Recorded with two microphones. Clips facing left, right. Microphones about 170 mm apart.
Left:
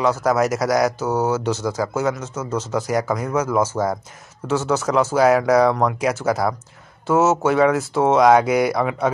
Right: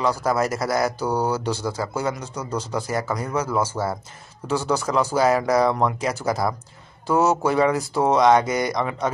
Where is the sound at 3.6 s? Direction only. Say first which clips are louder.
Left 4 dB; 10° right (ahead or behind).